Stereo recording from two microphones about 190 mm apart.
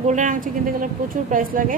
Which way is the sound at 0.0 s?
40° right (ahead or behind).